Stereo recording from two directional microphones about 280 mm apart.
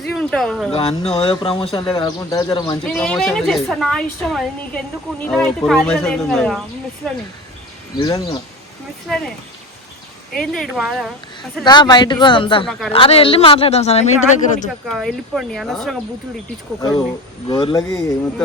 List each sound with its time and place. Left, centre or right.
0.0 s speech: centre
0.7 s speech: left
2.8 s a woman's voice: centre
7.9 s speech: centre
9.0 s a woman's voice: centre
10.3 s a woman's voice: centre
11.6 s a man's voice: centre
14.8 s a woman's voice: centre
17.5 s speech: centre